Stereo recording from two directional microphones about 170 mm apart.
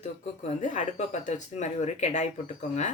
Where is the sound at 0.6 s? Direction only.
45° left (ahead or behind).